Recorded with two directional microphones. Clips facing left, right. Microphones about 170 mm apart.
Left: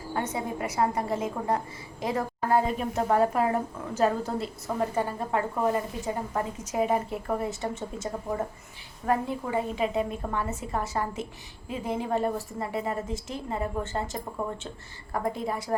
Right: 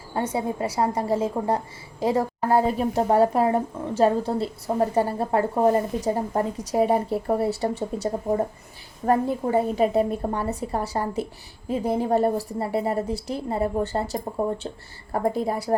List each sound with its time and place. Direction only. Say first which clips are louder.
0.3 s a woman's voice: right 4 dB; 30° right (ahead or behind)